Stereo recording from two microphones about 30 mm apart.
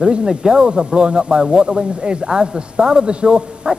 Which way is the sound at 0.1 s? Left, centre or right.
Right.